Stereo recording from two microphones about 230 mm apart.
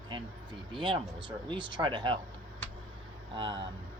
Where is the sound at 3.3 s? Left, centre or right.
Right.